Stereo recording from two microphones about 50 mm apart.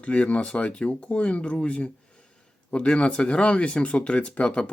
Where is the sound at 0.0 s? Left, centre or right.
Left.